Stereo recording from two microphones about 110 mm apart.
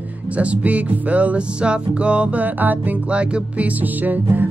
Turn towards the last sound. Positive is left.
turn(degrees=-15)  # may be behind; listen again after turning